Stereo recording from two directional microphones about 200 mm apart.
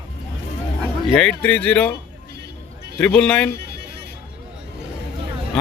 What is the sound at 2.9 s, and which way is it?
Speech, 5° left (ahead or behind).